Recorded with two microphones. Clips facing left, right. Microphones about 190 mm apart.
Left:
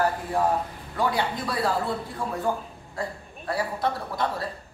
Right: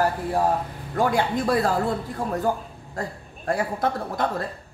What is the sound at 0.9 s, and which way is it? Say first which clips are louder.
Speech: right 4 dB; 45° right (ahead or behind).